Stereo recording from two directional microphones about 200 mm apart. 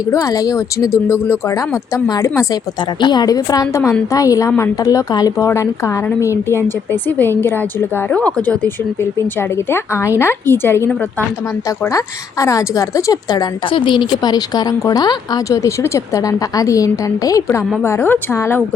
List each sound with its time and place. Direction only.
0.1 s a woman's voice: 15° left (ahead or behind)